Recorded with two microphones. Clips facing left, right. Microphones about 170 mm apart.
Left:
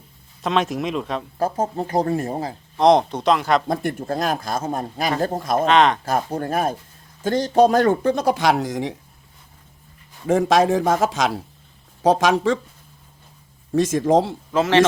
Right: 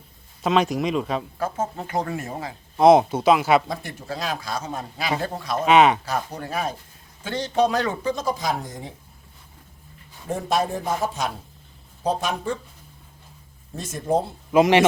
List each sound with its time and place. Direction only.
0.4 s speech: centre (ahead or behind)
1.4 s speech: 35° left (ahead or behind)
2.7 s speech: 5° right (ahead or behind)
3.7 s speech: 50° left (ahead or behind)
5.6 s speech: 10° right (ahead or behind)
6.1 s speech: 50° left (ahead or behind); by 9.0 s 90° left
10.2 s a man's voice: 90° left
13.7 s a man's voice: 90° left
14.5 s speech: 15° right (ahead or behind)